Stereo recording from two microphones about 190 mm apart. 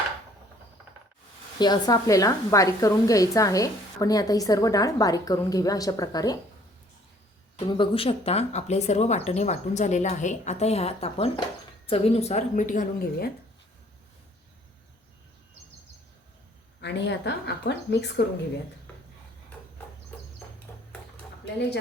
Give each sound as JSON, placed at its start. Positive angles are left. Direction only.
{"t": 1.5, "sound": "a woman's voice", "side_deg": 20}
{"t": 7.6, "sound": "speech", "side_deg": 30}
{"t": 16.8, "sound": "speech", "side_deg": 65}